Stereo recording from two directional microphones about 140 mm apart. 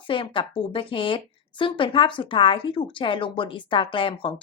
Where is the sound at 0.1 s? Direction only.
35° left (ahead or behind).